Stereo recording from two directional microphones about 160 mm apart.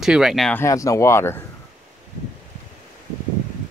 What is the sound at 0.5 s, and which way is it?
Speech, 20° left (ahead or behind).